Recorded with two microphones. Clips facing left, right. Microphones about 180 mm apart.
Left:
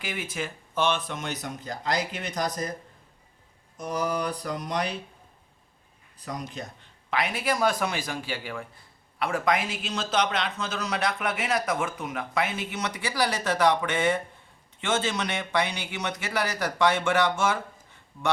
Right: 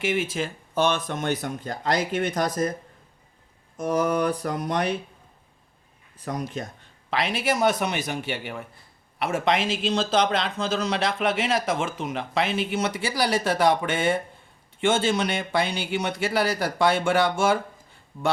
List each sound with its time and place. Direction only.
0.0 s speech: 25° right (ahead or behind); by 2.5 s 55° right (ahead or behind)
3.8 s speech: 50° right (ahead or behind)
6.2 s speech: 50° right (ahead or behind)
7.4 s speech: 25° right (ahead or behind)